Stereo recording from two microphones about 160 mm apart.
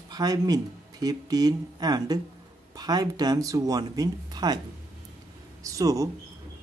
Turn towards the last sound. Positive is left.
turn(degrees=-20)  # may be behind; listen again after turning